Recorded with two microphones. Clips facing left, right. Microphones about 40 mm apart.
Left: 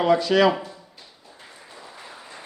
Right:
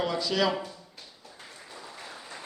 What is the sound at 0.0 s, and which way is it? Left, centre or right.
Speech, left.